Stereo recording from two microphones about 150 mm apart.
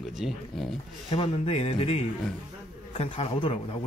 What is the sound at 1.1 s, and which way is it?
A man's voice, 40° left (ahead or behind).